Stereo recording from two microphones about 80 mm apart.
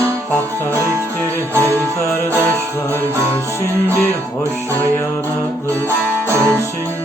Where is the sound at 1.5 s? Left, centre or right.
Right.